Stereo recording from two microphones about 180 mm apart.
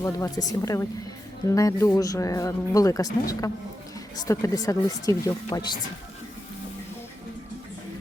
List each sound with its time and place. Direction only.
0.0 s a man's voice: 20° left (ahead or behind)